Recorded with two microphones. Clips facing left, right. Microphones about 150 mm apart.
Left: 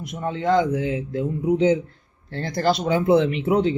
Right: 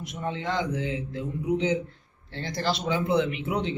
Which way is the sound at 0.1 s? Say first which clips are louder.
Left 9 dB; 45° left (ahead or behind).